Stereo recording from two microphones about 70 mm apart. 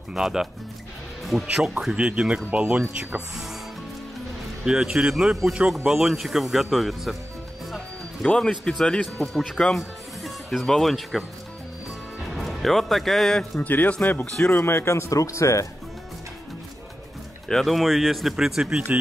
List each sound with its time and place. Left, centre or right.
0.1 s speech: centre
1.5 s speech: centre
4.6 s speech: centre
8.3 s speech: centre
12.4 s speech: centre
13.6 s speech: left
14.2 s speech: centre
14.5 s speech: left
17.5 s speech: centre